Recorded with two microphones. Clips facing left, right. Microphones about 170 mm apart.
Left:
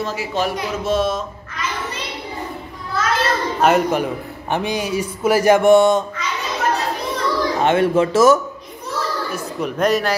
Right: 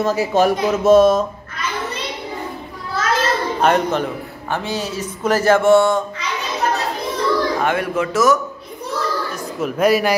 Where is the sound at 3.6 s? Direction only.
5° left (ahead or behind).